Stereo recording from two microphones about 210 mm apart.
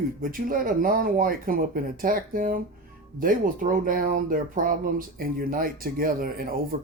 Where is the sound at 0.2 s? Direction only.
40° right (ahead or behind).